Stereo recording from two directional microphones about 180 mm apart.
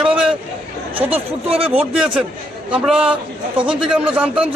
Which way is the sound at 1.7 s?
5° right (ahead or behind).